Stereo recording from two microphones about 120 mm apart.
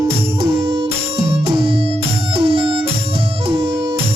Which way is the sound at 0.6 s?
55° right (ahead or behind).